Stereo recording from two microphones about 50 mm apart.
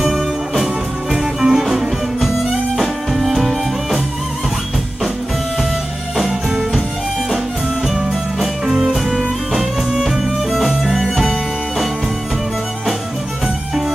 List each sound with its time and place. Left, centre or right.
1.1 s music: centre
6.1 s music: centre